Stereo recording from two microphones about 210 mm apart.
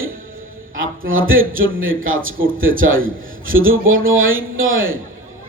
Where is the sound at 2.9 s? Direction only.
70° right (ahead or behind).